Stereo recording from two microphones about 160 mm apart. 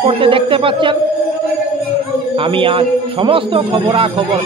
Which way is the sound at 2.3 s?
35° right (ahead or behind).